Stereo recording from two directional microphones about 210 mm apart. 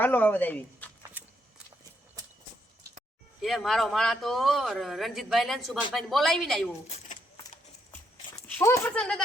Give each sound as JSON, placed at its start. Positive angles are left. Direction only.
{"t": 0.0, "sound": "speech", "side_deg": 10}
{"t": 1.2, "sound": "a sound", "side_deg": -10}
{"t": 3.4, "sound": "a man's voice", "side_deg": 0}
{"t": 6.8, "sound": "keys jangling", "side_deg": 35}
{"t": 8.3, "sound": "speech", "side_deg": 10}